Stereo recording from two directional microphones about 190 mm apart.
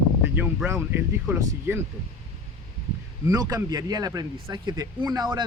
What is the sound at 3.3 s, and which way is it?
Speech, 20° right (ahead or behind).